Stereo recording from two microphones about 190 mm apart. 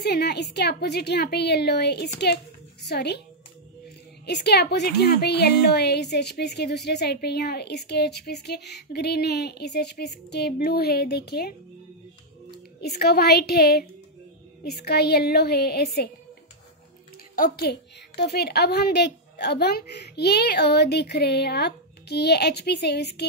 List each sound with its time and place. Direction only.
0.0 s a woman's voice: 60° left (ahead or behind)
4.3 s a woman's voice: 60° left (ahead or behind)
12.8 s a woman's voice: 60° left (ahead or behind)
17.4 s a woman's voice: 55° left (ahead or behind)